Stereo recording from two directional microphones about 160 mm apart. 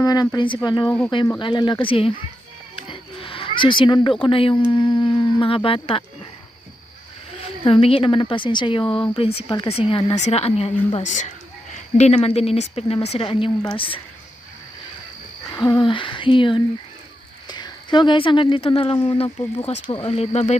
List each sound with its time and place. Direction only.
0.0 s a woman's voice: 25° left (ahead or behind)
2.9 s a sound: 35° left (ahead or behind)
4.2 s a woman's voice: 35° left (ahead or behind)
7.6 s a woman's voice: 35° left (ahead or behind)
15.5 s a woman's voice: 30° left (ahead or behind)